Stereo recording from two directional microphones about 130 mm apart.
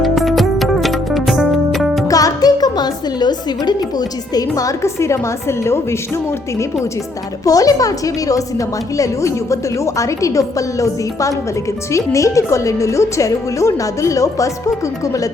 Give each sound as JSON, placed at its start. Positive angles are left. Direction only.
{"t": 0.0, "sound": "music", "side_deg": 0}
{"t": 2.0, "sound": "a woman's voice", "side_deg": 25}
{"t": 7.4, "sound": "a woman's voice", "side_deg": 25}